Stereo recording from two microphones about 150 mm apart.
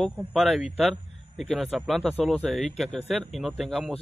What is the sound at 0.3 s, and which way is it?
Speech, centre (ahead or behind).